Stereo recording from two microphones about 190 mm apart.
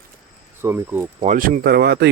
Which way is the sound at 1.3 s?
45° right (ahead or behind).